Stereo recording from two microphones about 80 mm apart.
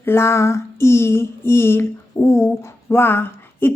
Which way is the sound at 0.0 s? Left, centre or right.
Left.